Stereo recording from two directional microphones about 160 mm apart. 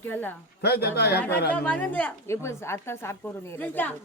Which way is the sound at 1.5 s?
10° left (ahead or behind).